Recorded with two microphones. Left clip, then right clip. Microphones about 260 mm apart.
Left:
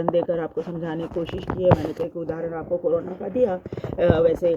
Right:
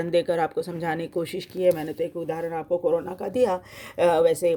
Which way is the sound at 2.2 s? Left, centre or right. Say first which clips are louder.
Even; right.